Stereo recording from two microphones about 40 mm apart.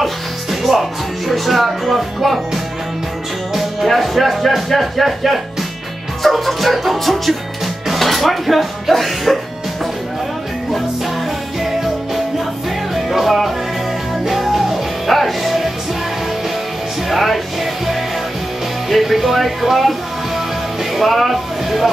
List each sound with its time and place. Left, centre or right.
0.0 s music: centre
1.3 s speech: centre
3.5 s speech: centre
12.9 s music: centre
17.1 s music: centre
18.9 s speech: centre